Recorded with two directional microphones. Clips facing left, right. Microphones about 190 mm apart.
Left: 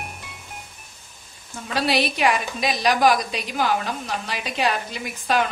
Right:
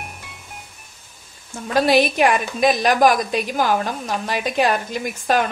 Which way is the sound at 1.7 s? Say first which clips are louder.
Right 6 dB; 50° right (ahead or behind).